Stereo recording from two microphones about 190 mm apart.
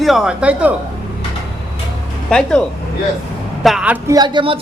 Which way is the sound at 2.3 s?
5° left (ahead or behind).